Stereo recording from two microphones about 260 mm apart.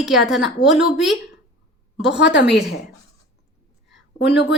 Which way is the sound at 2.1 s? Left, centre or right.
Left.